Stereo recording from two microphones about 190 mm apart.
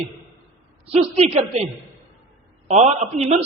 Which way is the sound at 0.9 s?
35° right (ahead or behind).